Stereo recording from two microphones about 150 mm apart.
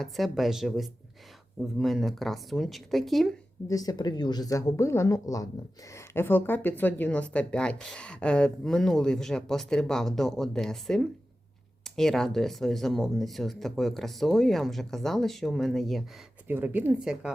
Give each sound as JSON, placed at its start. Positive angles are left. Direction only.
{"t": 0.0, "sound": "speech", "side_deg": 0}
{"t": 3.7, "sound": "speech", "side_deg": 25}
{"t": 16.5, "sound": "a woman's voice", "side_deg": -15}